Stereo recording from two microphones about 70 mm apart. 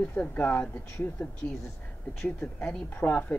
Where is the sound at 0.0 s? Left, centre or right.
Left.